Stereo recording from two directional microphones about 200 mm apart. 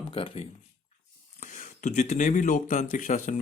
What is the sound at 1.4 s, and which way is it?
Speech, 40° left (ahead or behind).